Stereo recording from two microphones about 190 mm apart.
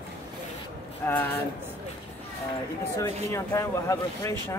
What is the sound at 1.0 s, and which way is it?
Speech, 10° left (ahead or behind).